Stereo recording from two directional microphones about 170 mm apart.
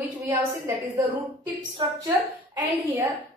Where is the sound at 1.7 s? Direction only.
25° right (ahead or behind).